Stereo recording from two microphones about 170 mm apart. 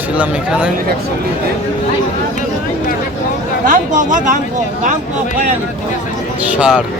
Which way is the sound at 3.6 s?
50° right (ahead or behind).